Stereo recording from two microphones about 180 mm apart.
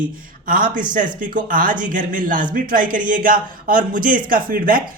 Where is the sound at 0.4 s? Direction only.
50° right (ahead or behind).